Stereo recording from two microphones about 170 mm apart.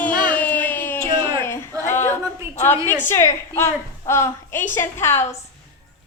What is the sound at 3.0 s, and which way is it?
A woman's voice, 15° left (ahead or behind).